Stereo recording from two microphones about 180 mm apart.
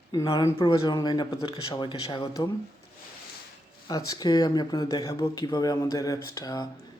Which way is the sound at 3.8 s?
20° left (ahead or behind).